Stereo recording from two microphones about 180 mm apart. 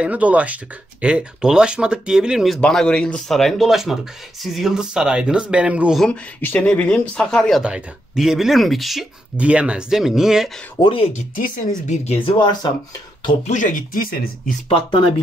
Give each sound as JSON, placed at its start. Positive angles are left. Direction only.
{"t": 0.0, "sound": "speech", "side_deg": -5}
{"t": 10.8, "sound": "speech", "side_deg": 30}
{"t": 12.4, "sound": "speech", "side_deg": 25}
{"t": 13.5, "sound": "speech", "side_deg": 45}
{"t": 14.7, "sound": "speech", "side_deg": 30}